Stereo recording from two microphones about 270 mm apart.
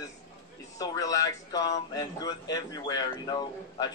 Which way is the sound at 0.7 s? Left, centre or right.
Centre.